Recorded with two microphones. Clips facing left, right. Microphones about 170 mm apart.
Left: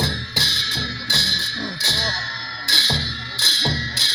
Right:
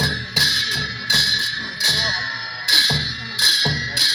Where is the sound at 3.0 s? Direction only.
15° right (ahead or behind).